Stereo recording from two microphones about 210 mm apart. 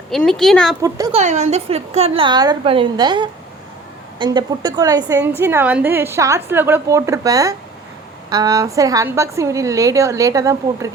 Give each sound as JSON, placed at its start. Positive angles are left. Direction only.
{"t": 0.1, "sound": "speech", "side_deg": 0}
{"t": 0.8, "sound": "a woman's voice", "side_deg": -15}
{"t": 1.1, "sound": "a woman's voice", "side_deg": -35}